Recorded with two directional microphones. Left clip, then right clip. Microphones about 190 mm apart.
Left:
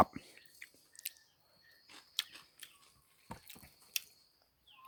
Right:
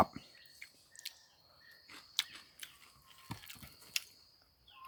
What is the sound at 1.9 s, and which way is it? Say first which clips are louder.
Chewing: right 2 dB; 20° left (ahead or behind).